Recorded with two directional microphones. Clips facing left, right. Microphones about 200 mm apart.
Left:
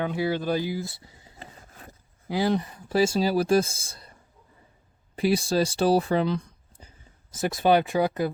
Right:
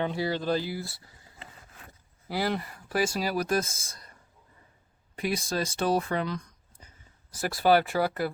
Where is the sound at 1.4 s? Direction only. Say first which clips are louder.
Left 4 dB; 40° left (ahead or behind).